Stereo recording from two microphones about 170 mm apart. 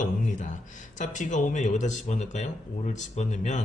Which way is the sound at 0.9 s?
45° left (ahead or behind).